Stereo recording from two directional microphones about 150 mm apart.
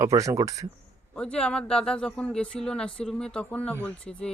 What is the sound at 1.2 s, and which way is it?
Speech, 5° left (ahead or behind).